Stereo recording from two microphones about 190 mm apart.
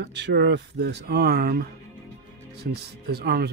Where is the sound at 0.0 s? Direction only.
65° right (ahead or behind).